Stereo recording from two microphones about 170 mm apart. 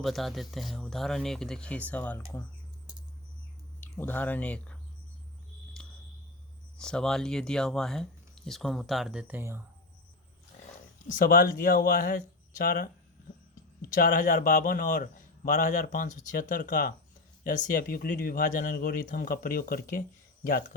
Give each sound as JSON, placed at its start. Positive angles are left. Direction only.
{"t": 0.0, "sound": "speech", "side_deg": 0}
{"t": 3.8, "sound": "speech", "side_deg": 10}
{"t": 5.8, "sound": "a sound", "side_deg": 5}
{"t": 6.7, "sound": "speech", "side_deg": 5}
{"t": 11.1, "sound": "speech", "side_deg": 55}
{"t": 12.5, "sound": "speech", "side_deg": 65}
{"t": 13.9, "sound": "speech", "side_deg": 50}